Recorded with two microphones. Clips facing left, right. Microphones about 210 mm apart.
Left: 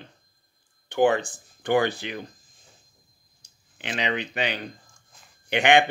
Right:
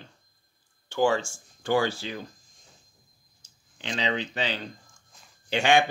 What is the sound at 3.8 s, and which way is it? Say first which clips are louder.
Speech: left 1 dB; 60° left (ahead or behind).